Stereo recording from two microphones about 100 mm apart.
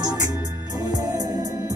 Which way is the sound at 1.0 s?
30° right (ahead or behind).